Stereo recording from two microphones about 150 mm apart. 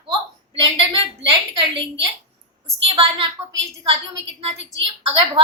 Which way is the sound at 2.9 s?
40° right (ahead or behind).